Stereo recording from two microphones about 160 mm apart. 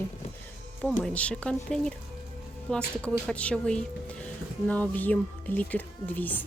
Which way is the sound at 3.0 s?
5° left (ahead or behind).